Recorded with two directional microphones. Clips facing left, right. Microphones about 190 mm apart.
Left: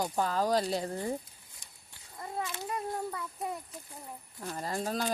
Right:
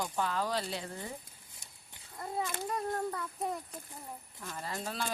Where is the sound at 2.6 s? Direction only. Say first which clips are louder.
Right 1 dB; 5° left (ahead or behind).